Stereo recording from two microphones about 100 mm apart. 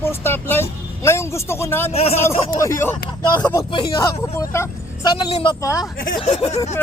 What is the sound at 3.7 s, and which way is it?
Speech, 55° left (ahead or behind).